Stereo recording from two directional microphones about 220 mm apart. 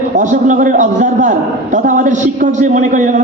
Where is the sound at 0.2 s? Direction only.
35° right (ahead or behind).